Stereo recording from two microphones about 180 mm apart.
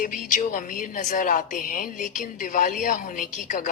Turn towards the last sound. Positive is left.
turn(degrees=50)  # may be behind; listen again after turning